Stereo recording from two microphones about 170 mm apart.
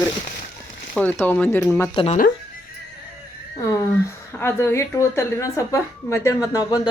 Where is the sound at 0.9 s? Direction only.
10° left (ahead or behind).